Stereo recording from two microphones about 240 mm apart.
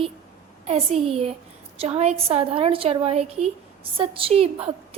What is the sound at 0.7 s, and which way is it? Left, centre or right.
A woman's voice, right.